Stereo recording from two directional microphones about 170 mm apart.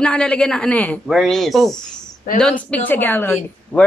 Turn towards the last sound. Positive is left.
turn(degrees=10)  # may be behind; listen again after turning